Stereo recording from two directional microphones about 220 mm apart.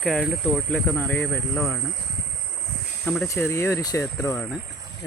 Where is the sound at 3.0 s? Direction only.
5° left (ahead or behind).